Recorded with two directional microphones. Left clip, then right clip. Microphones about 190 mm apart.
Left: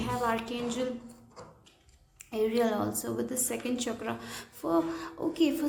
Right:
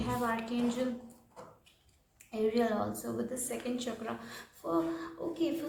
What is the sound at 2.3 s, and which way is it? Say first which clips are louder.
A woman's voice: left 3 dB; 35° left (ahead or behind).